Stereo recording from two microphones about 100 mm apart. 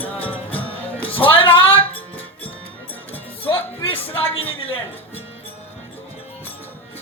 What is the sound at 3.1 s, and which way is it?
Music, 20° left (ahead or behind).